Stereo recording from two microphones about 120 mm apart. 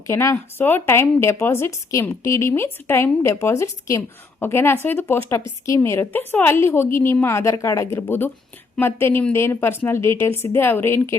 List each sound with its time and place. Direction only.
0.1 s speech: 25° left (ahead or behind)